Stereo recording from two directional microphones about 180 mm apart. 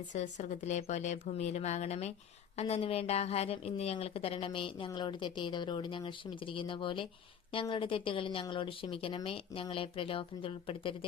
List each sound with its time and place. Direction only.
0.1 s speech: 40° left (ahead or behind)